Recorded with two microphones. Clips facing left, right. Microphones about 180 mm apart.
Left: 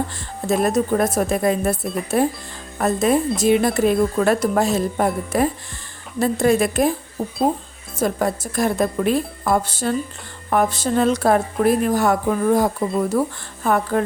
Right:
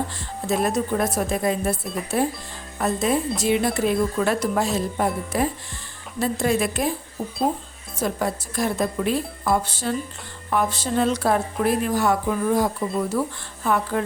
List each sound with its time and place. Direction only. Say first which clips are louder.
0.4 s speech: left 4 dB; 45° left (ahead or behind)
7.9 s speech: left 4 dB; 50° left (ahead or behind)